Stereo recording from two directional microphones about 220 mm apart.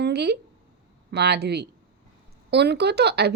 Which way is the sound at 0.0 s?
50° right (ahead or behind).